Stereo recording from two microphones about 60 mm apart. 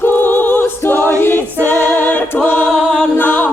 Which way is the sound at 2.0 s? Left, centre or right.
Left.